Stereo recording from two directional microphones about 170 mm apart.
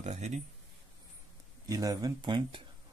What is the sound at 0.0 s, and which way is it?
Speech, 40° right (ahead or behind).